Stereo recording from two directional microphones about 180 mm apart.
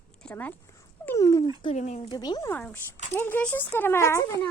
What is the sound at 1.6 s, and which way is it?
Speech, 40° left (ahead or behind).